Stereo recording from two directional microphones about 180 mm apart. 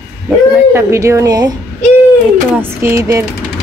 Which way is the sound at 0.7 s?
15° right (ahead or behind).